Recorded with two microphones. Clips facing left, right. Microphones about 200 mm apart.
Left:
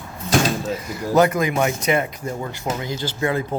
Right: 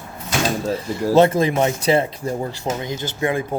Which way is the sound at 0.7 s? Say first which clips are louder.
Right 4 dB; 30° right (ahead or behind).